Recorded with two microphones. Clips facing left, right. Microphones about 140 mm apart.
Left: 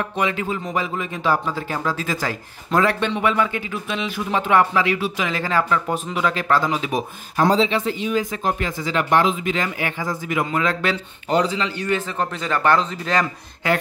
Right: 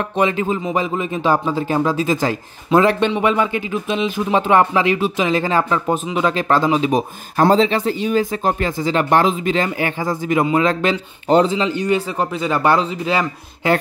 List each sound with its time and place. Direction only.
0.2 s speech: 25° right (ahead or behind)
7.3 s speech: 45° right (ahead or behind); by 13.3 s 10° right (ahead or behind)